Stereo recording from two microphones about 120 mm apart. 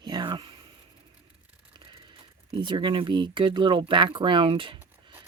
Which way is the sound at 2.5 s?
45° right (ahead or behind).